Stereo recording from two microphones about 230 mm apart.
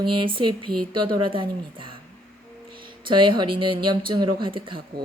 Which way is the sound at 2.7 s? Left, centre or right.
Right.